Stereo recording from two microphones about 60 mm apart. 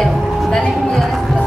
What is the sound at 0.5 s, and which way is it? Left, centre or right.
Music, centre.